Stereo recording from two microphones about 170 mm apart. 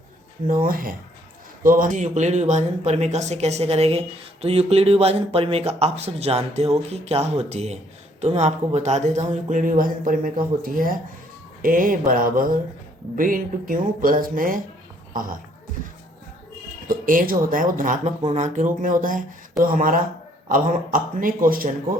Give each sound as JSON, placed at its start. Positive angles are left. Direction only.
{"t": 0.4, "sound": "speech", "side_deg": -55}
{"t": 16.9, "sound": "speech", "side_deg": -55}